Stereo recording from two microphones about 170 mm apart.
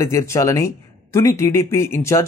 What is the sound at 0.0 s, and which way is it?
Speech, 15° left (ahead or behind).